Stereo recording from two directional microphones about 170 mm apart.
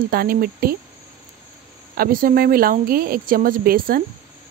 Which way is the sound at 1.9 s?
60° right (ahead or behind).